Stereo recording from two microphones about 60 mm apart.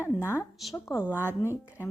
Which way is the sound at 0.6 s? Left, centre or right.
Centre.